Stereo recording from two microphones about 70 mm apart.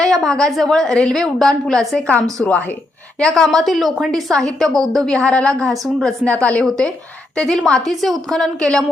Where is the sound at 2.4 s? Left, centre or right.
Left.